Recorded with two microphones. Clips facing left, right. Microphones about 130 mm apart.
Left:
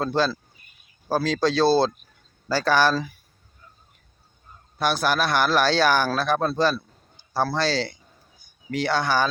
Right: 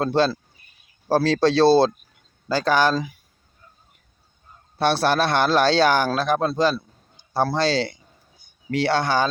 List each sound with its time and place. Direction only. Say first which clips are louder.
0.0 s a man's voice: right 3 dB; 25° right (ahead or behind)
4.8 s a man's voice: right 3 dB; 30° right (ahead or behind)